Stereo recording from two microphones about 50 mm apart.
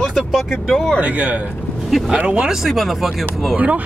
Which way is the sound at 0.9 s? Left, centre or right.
Right.